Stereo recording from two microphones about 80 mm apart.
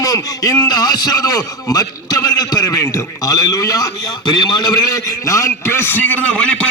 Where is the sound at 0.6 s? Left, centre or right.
Left.